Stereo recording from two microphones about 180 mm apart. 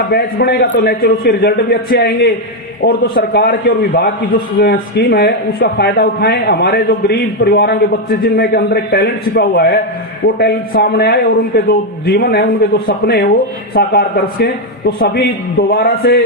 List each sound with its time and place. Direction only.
0.1 s a man's voice: 65° left (ahead or behind)